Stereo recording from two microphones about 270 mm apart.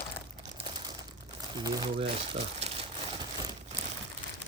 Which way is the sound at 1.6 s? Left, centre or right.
Right.